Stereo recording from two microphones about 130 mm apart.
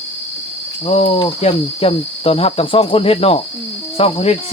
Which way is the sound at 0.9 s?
50° left (ahead or behind).